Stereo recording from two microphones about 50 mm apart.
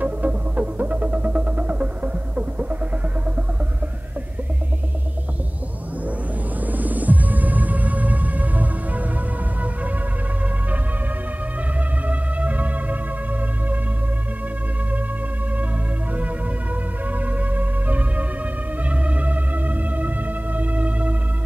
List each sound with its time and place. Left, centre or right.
0.0 s music: right
6.6 s music: right
12.1 s music: right
17.1 s music: right